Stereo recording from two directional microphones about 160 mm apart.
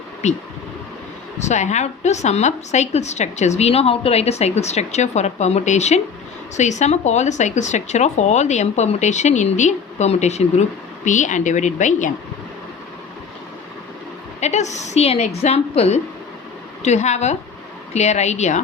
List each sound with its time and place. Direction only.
0.2 s speech: 45° left (ahead or behind)
14.4 s speech: 45° left (ahead or behind)